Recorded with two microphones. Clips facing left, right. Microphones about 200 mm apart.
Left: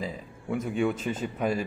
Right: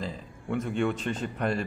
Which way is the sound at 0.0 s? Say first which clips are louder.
Left 1 dB; 5° left (ahead or behind).